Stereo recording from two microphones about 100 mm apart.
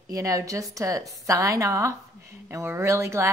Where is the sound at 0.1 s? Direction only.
35° right (ahead or behind).